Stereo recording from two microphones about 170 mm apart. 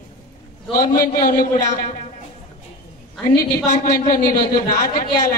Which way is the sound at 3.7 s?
50° left (ahead or behind).